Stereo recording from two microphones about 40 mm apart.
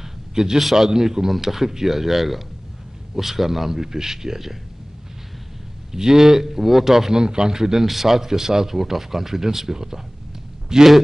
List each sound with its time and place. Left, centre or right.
0.3 s a man's voice: centre
0.6 s speech: centre
5.9 s speech: centre